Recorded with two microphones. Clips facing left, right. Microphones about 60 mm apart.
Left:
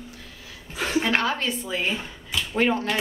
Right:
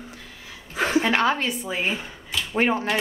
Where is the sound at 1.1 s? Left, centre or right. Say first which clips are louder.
Right 2 dB; right.